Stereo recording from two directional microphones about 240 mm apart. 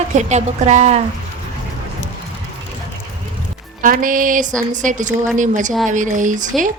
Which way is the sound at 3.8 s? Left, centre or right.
Right.